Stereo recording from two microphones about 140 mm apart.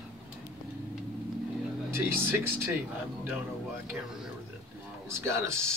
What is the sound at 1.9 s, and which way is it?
Speech, 15° right (ahead or behind).